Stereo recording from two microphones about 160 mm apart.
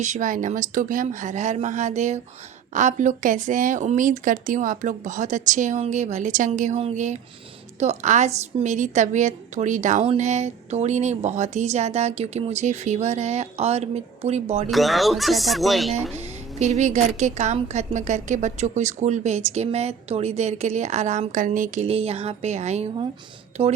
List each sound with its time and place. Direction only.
0.0 s a woman's voice: 50° right (ahead or behind)
14.7 s speech: centre (ahead or behind)
16.1 s a woman's voice: 45° right (ahead or behind)
21.8 s a woman's voice: 40° right (ahead or behind)